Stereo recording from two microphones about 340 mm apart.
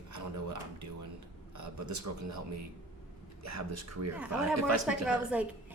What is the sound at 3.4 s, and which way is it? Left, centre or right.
Speech, right.